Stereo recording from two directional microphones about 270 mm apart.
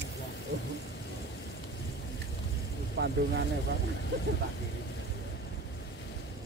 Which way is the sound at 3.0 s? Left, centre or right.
Right.